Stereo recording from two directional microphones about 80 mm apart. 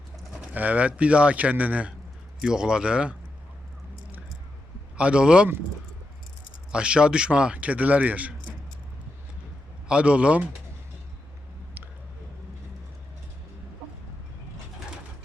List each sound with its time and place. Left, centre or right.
0.5 s a man's voice: centre
4.9 s a man's voice: centre
6.7 s a man's voice: centre
9.9 s a man's voice: centre